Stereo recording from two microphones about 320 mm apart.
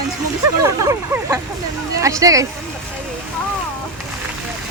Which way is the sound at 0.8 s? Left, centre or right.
Centre.